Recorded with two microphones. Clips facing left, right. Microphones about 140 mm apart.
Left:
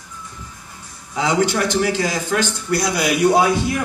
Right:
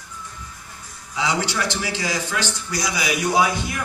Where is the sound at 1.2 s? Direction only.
50° left (ahead or behind).